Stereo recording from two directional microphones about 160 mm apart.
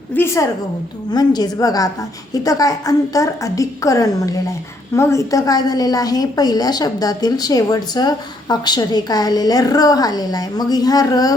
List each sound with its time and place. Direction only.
0.1 s a woman's voice: 15° left (ahead or behind)